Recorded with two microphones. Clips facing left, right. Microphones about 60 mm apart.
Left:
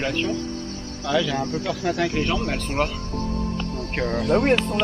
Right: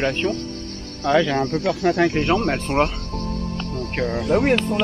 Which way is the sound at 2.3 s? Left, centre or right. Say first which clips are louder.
Right 5 dB; right.